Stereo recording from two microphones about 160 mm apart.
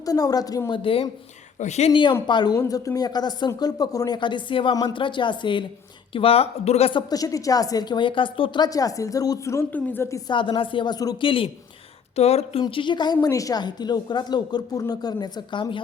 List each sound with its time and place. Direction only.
0.0 s a woman's voice: 20° left (ahead or behind)
1.5 s speech: 45° left (ahead or behind)
1.9 s a woman's voice: 30° left (ahead or behind)
7.1 s a woman's voice: 20° left (ahead or behind)
10.2 s a woman's voice: 30° left (ahead or behind)